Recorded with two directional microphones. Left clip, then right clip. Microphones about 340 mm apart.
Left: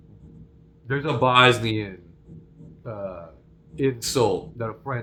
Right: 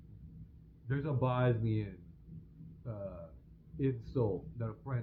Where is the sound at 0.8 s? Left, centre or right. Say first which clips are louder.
Left 15 dB; centre.